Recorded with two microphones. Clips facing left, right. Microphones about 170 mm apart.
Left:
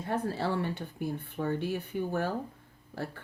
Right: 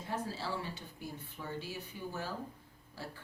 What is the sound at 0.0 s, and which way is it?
Speech, 60° left (ahead or behind).